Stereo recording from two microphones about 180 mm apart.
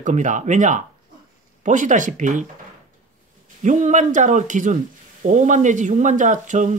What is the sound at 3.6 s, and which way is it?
Speech, 45° right (ahead or behind).